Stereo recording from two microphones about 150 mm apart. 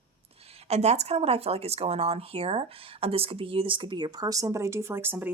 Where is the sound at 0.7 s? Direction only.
45° right (ahead or behind); by 5.3 s 15° right (ahead or behind).